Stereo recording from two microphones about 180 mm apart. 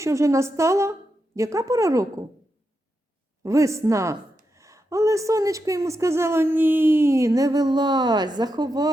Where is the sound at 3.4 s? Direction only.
15° right (ahead or behind).